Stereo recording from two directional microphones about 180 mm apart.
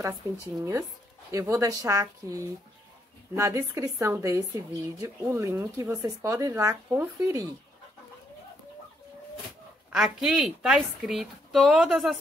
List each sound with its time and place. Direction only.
0.0 s speech: 20° right (ahead or behind)
9.9 s a woman's voice: 5° right (ahead or behind)